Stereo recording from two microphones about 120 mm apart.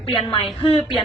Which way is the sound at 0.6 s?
50° left (ahead or behind).